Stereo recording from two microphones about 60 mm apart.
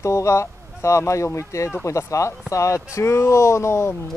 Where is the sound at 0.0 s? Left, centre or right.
Left.